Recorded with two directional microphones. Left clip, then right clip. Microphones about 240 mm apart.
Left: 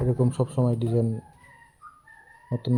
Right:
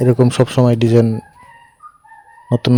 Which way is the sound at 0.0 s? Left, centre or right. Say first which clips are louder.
Right 13 dB; right.